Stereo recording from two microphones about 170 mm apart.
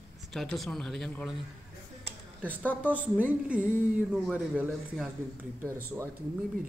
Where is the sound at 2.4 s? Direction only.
10° left (ahead or behind).